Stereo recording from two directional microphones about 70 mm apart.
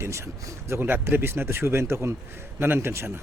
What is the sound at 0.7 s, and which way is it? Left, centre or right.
Speech, right.